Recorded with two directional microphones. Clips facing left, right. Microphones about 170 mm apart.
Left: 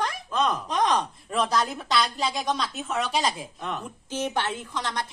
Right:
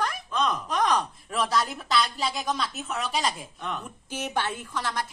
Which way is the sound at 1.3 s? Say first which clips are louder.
Left 2 dB; centre (ahead or behind).